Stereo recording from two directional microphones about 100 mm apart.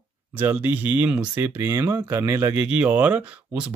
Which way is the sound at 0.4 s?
20° right (ahead or behind).